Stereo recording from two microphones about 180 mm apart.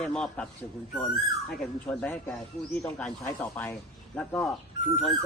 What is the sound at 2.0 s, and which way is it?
A man's voice, 5° left (ahead or behind).